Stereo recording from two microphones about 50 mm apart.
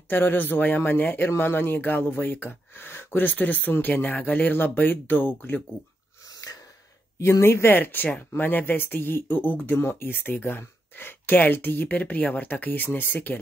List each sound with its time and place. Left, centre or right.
0.1 s speech: left
7.2 s speech: left
9.8 s speech: left